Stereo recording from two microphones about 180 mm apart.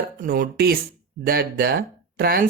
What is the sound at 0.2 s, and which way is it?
Speech, 55° right (ahead or behind).